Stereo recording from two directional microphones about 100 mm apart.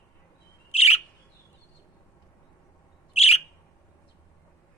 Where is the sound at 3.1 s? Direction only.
90° left.